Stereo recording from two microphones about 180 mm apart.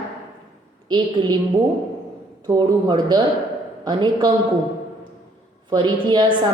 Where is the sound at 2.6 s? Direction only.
25° right (ahead or behind).